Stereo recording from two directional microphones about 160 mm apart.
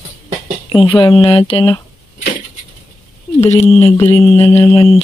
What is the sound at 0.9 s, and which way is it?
Speech, 30° left (ahead or behind).